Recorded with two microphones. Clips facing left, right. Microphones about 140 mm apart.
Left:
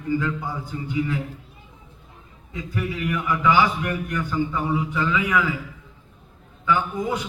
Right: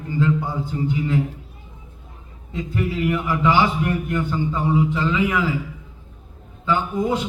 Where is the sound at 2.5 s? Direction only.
25° right (ahead or behind).